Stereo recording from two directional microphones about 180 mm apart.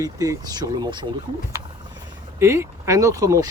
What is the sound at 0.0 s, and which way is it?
Speech, 20° right (ahead or behind).